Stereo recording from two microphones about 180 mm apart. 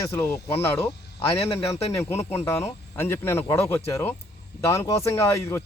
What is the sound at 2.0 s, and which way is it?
Speech, 15° left (ahead or behind).